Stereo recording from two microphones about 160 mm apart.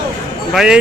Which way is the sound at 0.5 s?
5° right (ahead or behind).